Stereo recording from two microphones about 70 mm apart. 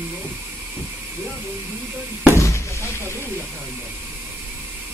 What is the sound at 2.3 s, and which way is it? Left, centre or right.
Speech, left.